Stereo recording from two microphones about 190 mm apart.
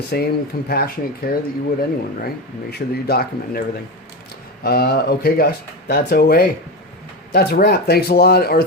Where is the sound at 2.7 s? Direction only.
55° left (ahead or behind).